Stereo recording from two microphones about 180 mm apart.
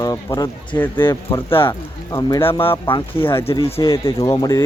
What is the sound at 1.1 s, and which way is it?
Speech, 30° left (ahead or behind).